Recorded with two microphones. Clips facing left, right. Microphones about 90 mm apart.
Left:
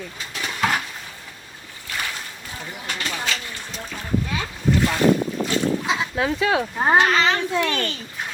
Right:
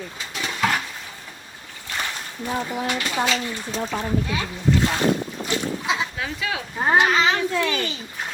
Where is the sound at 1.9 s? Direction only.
25° right (ahead or behind).